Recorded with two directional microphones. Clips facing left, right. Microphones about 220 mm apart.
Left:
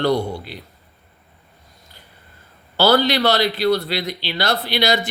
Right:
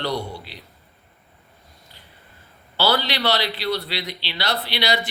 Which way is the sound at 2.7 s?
45° left (ahead or behind).